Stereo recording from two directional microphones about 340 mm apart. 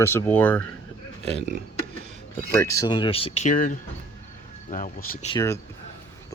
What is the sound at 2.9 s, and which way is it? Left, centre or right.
Speech, centre.